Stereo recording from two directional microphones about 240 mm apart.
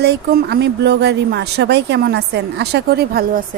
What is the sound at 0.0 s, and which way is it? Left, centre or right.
Speech, right.